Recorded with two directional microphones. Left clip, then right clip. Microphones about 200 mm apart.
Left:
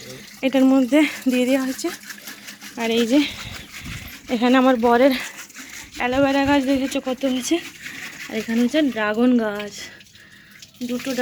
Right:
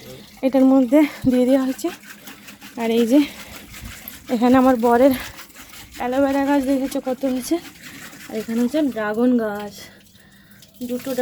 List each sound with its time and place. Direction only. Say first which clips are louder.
0.4 s speech: right 2 dB; 10° right (ahead or behind)
2.7 s speech: right 2 dB; 20° right (ahead or behind)
6.0 s speech: left 1 dB; 10° right (ahead or behind)